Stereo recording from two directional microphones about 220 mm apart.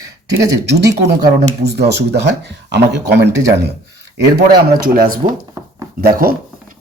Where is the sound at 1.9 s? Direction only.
50° right (ahead or behind).